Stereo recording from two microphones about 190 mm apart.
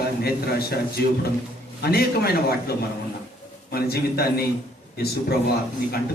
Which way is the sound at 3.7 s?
55° left (ahead or behind).